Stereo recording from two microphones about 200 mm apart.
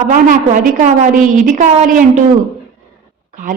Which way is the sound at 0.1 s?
40° right (ahead or behind).